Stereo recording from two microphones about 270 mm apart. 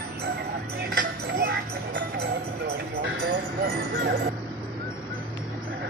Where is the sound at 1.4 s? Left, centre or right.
Right.